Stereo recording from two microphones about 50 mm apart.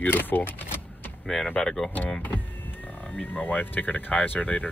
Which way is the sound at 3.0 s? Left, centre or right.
Left.